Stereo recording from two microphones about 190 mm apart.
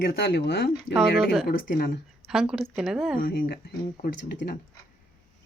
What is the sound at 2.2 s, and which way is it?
Speech, centre (ahead or behind).